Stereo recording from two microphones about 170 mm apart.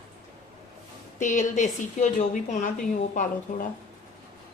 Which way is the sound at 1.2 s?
45° left (ahead or behind).